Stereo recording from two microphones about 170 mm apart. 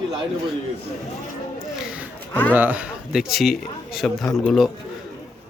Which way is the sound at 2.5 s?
10° right (ahead or behind).